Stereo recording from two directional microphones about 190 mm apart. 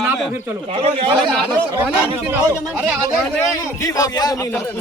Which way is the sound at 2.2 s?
10° right (ahead or behind).